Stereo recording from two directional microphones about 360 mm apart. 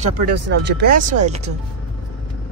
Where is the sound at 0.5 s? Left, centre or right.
Right.